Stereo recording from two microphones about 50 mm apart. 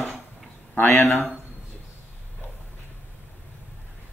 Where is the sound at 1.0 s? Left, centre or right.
Centre.